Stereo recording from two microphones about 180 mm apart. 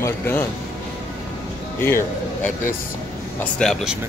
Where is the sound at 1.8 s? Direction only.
15° left (ahead or behind).